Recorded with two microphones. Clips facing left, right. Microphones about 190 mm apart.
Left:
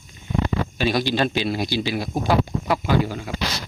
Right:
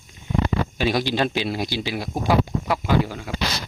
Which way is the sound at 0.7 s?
15° right (ahead or behind).